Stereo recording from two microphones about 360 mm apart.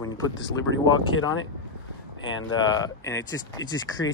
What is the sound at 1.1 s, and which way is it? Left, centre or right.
Speech, left.